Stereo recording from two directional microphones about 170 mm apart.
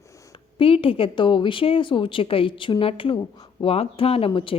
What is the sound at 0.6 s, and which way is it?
A woman's voice, 30° left (ahead or behind).